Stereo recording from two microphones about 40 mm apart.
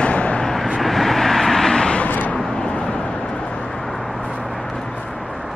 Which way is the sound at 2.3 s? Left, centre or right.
Left.